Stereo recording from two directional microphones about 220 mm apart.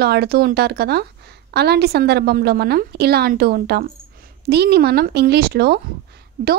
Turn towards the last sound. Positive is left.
turn(degrees=-45)  # may be behind; listen again after turning